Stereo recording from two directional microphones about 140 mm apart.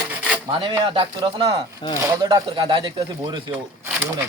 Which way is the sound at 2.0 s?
25° right (ahead or behind).